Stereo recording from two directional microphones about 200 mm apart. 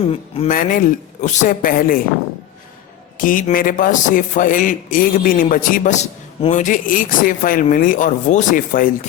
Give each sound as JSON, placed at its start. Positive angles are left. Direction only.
{"t": 0.0, "sound": "speech", "side_deg": 30}
{"t": 0.4, "sound": "speech", "side_deg": 40}
{"t": 3.2, "sound": "speech", "side_deg": 40}